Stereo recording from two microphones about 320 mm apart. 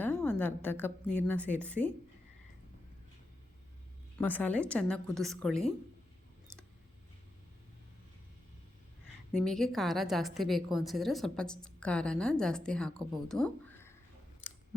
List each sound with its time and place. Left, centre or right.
0.0 s a woman's voice: centre
4.2 s a woman's voice: centre
9.4 s a woman's voice: centre